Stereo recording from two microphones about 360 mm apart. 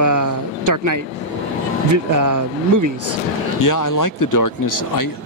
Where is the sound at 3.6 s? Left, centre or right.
Left.